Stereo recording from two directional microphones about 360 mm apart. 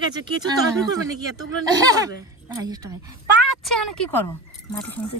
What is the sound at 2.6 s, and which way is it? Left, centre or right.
Speech, centre.